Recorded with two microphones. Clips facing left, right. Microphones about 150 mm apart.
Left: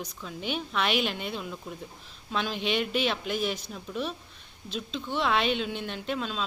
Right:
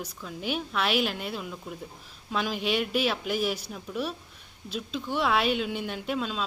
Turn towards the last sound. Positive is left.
turn(degrees=-5)  # may be behind; listen again after turning